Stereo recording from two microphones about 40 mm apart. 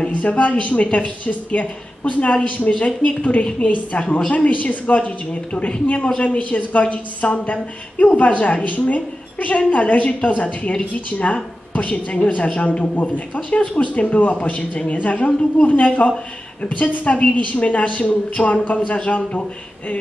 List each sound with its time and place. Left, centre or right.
0.1 s a woman's voice: left
6.5 s a woman's voice: left